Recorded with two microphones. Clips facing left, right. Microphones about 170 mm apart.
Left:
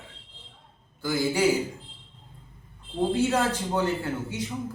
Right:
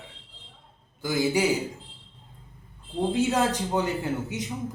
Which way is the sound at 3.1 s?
15° right (ahead or behind).